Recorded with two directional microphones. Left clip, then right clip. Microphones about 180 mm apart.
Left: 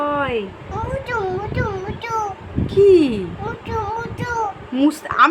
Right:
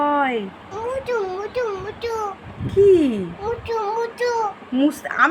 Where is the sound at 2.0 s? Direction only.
20° left (ahead or behind).